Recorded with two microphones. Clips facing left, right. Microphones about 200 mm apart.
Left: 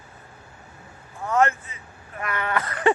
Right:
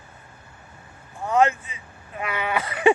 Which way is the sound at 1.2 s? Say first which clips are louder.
Right 2 dB; 15° right (ahead or behind).